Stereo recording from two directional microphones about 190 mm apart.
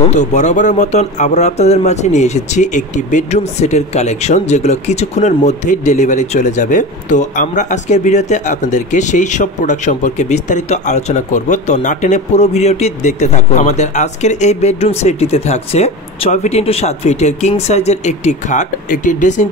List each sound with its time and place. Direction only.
0.1 s speech: 40° left (ahead or behind)